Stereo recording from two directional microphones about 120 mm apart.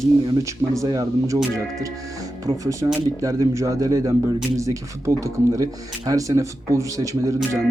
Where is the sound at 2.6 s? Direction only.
25° right (ahead or behind).